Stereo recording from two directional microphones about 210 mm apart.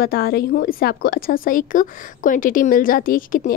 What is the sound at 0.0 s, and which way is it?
A woman's voice, 45° left (ahead or behind).